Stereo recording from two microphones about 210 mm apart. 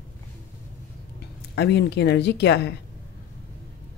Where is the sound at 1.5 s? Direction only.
55° left (ahead or behind).